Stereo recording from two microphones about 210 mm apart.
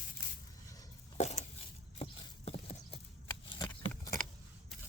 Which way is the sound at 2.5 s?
30° left (ahead or behind).